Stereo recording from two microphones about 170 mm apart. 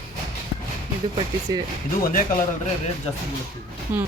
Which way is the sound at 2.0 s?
60° left (ahead or behind).